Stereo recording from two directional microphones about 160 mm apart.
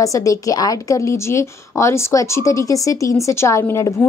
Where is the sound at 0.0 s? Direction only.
20° left (ahead or behind).